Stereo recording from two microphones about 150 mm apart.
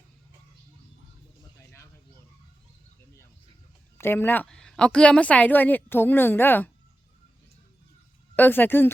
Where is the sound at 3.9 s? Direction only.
15° left (ahead or behind).